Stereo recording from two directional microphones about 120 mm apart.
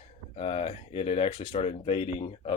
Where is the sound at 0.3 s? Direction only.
55° left (ahead or behind).